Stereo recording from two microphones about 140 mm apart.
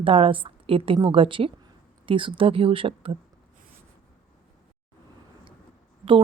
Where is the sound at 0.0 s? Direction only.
40° right (ahead or behind).